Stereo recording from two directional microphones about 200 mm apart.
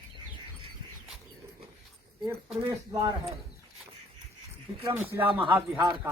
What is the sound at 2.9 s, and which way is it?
Speech, 20° right (ahead or behind).